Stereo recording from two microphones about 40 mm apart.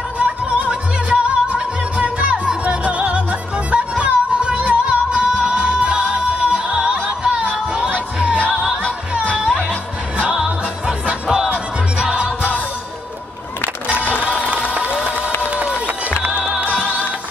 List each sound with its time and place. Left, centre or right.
0.2 s music: right
10.2 s music: right
14.4 s a sound: right
15.4 s run: right
16.3 s music: right